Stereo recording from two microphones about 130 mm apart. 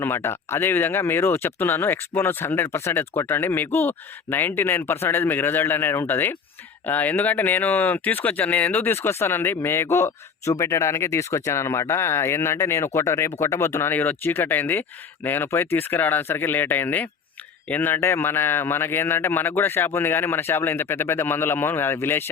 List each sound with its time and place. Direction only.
0.0 s speech: 20° left (ahead or behind)